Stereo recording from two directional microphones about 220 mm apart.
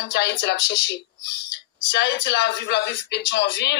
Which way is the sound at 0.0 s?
50° left (ahead or behind).